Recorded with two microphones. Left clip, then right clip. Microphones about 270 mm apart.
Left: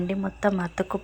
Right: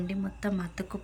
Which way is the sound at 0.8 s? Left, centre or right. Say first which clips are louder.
Left 11 dB; centre.